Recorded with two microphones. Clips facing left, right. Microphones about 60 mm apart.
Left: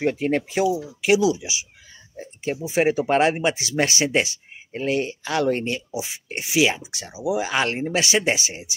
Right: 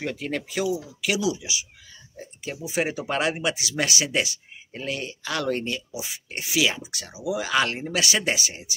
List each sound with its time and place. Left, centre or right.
0.0 s speech: left